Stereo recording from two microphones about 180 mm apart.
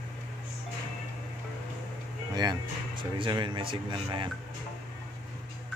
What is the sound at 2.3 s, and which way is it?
Speech, 25° right (ahead or behind).